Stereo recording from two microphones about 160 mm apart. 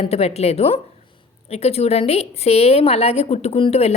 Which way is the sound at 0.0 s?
40° left (ahead or behind).